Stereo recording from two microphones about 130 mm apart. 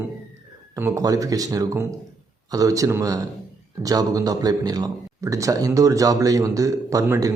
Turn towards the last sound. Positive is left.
turn(degrees=-25)  # may be behind; listen again after turning